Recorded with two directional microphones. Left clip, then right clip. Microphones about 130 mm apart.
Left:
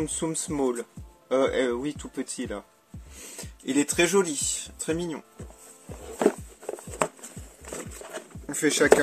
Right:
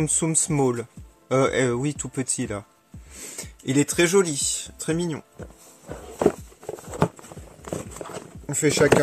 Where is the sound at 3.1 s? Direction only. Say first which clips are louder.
Right 4 dB; 55° right (ahead or behind).